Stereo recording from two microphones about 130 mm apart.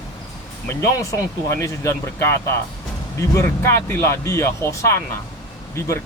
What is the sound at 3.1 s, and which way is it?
Speech, 20° left (ahead or behind).